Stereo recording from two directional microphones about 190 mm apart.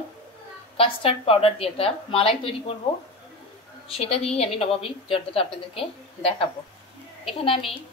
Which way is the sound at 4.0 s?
35° left (ahead or behind).